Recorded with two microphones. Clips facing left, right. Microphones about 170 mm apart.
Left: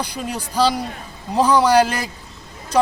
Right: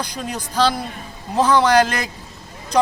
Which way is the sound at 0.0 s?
10° left (ahead or behind).